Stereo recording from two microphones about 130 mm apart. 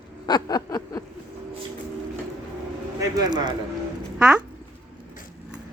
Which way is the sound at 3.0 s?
30° right (ahead or behind).